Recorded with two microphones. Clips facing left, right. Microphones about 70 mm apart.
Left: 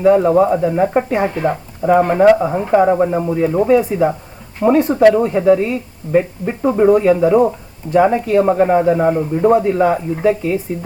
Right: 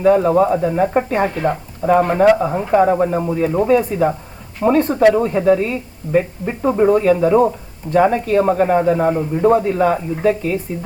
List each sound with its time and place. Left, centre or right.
0.0 s a man's voice: centre
1.1 s a man's voice: centre